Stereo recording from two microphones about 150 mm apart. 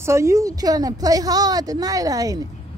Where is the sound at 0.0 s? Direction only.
20° right (ahead or behind).